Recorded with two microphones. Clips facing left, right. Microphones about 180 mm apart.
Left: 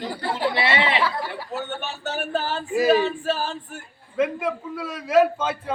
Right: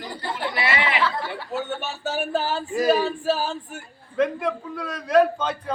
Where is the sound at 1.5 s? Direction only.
10° right (ahead or behind).